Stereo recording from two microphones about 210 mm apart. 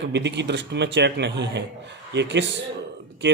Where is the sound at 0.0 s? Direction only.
55° right (ahead or behind).